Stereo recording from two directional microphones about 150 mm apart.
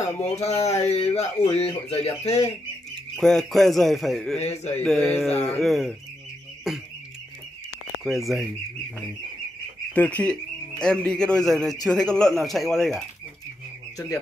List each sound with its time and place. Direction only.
0.0 s speech: 45° left (ahead or behind)
3.2 s a man's voice: 5° left (ahead or behind)
4.4 s speech: 45° left (ahead or behind)
4.7 s a sound: 5° left (ahead or behind)
5.6 s a man's voice: centre (ahead or behind)
8.0 s a man's voice: centre (ahead or behind)
9.9 s a sound: 10° left (ahead or behind)
10.8 s a man's voice: 5° left (ahead or behind)
13.9 s speech: 25° left (ahead or behind)